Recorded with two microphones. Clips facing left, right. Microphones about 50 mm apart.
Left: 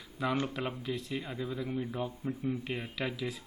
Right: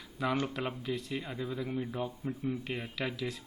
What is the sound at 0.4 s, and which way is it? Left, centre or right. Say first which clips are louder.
Speech: even; centre.